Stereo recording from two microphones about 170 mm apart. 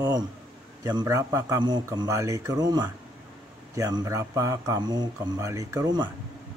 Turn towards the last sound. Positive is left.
turn(degrees=-20)  # may be behind; listen again after turning